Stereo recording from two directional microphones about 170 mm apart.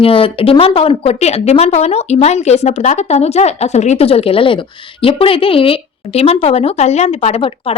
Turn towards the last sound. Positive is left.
turn(degrees=35)  # may be behind; listen again after turning